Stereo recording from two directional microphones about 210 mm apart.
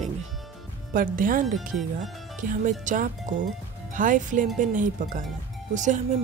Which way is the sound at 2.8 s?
40° right (ahead or behind).